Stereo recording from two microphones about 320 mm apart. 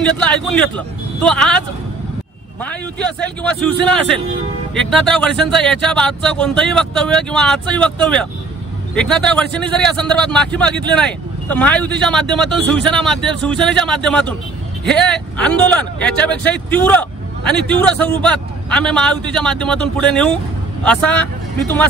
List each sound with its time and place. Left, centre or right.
0.0 s speech: centre
2.6 s speech: centre